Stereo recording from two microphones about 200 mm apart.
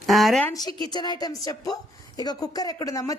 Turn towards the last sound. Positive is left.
turn(degrees=15)  # may be behind; listen again after turning